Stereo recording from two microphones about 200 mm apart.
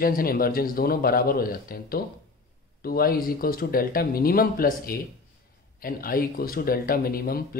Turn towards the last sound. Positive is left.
turn(degrees=50)  # may be behind; listen again after turning